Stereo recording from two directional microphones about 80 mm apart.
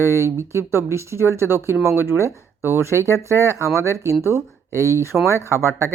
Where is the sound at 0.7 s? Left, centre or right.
Right.